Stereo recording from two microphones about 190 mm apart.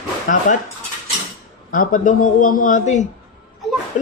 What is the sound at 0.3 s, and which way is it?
Speech, 45° left (ahead or behind).